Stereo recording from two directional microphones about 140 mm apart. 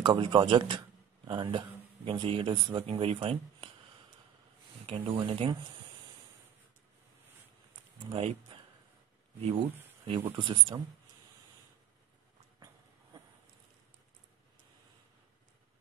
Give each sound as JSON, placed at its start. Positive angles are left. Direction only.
{"t": 0.0, "sound": "speech", "side_deg": -35}
{"t": 4.8, "sound": "speech", "side_deg": -40}
{"t": 8.1, "sound": "speech", "side_deg": -40}
{"t": 10.3, "sound": "speech", "side_deg": -35}